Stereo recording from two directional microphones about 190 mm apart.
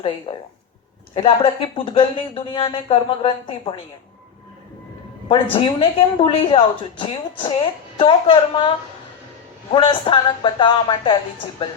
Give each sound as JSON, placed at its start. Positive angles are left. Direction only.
{"t": 0.3, "sound": "speech", "side_deg": 30}
{"t": 5.3, "sound": "speech", "side_deg": 25}
{"t": 9.7, "sound": "speech", "side_deg": 25}